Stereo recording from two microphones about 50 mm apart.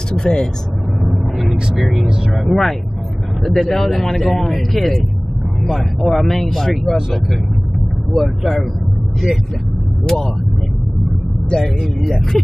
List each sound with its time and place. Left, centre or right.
0.1 s speech: centre
1.0 s vehicle: centre
2.3 s a man's voice: centre
8.1 s a man's voice: centre
10.0 s speech: centre
11.5 s speech: centre